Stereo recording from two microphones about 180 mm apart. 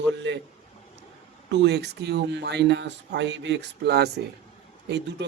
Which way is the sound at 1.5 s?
75° right (ahead or behind).